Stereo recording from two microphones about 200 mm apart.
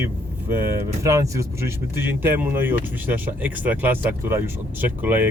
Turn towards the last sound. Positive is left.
turn(degrees=-10)  # may be behind; listen again after turning